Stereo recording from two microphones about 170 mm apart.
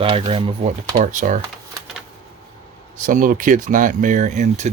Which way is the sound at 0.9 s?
50° right (ahead or behind).